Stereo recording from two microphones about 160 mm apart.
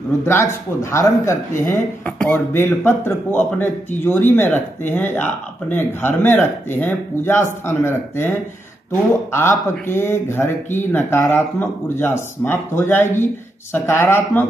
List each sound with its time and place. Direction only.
0.2 s speech: 20° left (ahead or behind)